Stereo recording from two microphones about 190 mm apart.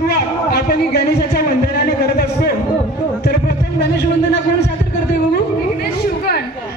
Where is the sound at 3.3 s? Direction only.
60° left (ahead or behind).